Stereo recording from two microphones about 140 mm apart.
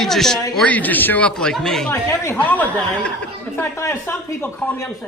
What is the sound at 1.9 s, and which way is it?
Speech, 20° left (ahead or behind).